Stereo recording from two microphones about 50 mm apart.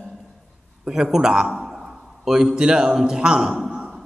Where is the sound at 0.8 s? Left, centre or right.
Centre.